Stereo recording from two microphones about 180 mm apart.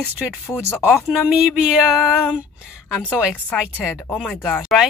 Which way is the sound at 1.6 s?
Centre (ahead or behind).